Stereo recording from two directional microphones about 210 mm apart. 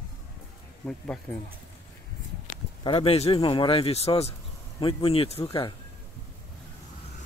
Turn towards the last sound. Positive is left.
turn(degrees=20)  # may be behind; listen again after turning